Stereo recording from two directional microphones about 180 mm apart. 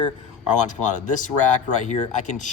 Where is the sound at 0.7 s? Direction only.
45° left (ahead or behind).